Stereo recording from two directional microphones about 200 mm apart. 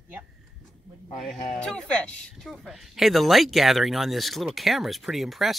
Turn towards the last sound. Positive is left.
turn(degrees=0)  # may be behind; listen again after turning